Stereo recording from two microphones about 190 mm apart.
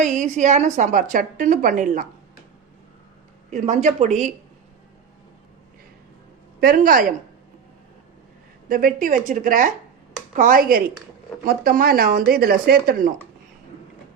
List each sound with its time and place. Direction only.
0.0 s a woman's voice: 40° right (ahead or behind)
3.5 s a woman's voice: 40° right (ahead or behind)
6.6 s speech: 50° right (ahead or behind)
8.7 s speech: 45° right (ahead or behind)